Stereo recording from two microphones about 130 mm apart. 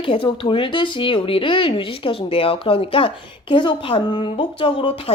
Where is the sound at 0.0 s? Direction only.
40° left (ahead or behind).